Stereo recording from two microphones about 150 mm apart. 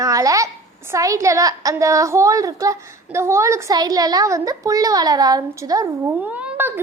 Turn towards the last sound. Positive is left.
turn(degrees=-15)  # may be behind; listen again after turning